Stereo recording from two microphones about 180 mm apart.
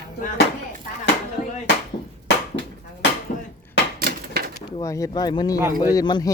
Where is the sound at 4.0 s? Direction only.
60° right (ahead or behind).